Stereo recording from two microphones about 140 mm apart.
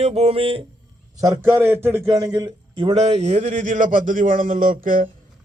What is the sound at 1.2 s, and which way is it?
A man's voice, 20° right (ahead or behind).